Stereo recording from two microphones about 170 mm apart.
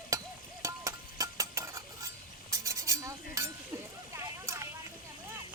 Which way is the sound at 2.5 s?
20° right (ahead or behind).